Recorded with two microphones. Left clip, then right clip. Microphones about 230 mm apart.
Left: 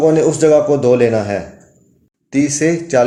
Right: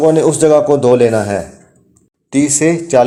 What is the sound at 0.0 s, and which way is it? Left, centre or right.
A man's voice, centre.